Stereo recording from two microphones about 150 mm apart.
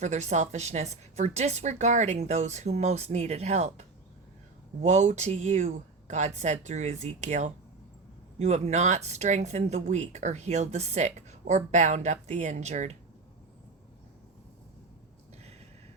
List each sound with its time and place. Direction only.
0.0 s speech: 50° right (ahead or behind)